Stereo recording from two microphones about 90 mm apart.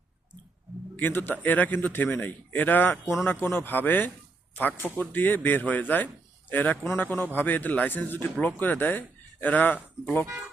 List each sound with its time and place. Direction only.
0.9 s speech: 25° left (ahead or behind)